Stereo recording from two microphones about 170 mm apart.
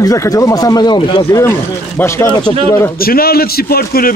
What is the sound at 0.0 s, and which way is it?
Speech, 20° left (ahead or behind).